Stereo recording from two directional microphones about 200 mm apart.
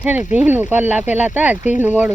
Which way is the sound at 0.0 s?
5° right (ahead or behind).